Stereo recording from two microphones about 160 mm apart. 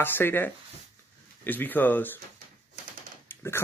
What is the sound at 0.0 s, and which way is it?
Speech, 15° left (ahead or behind).